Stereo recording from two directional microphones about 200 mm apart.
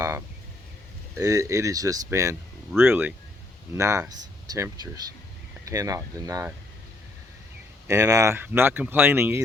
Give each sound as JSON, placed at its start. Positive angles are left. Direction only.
{"t": 1.1, "sound": "speech", "side_deg": -15}
{"t": 7.9, "sound": "speech", "side_deg": -15}